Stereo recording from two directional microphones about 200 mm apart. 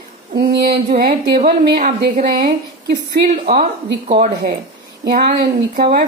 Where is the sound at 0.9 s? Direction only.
50° right (ahead or behind).